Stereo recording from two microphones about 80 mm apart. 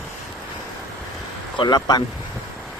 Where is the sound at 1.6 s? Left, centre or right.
Left.